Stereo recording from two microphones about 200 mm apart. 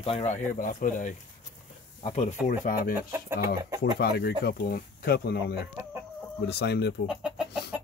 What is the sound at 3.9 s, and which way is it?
Speech, 50° left (ahead or behind).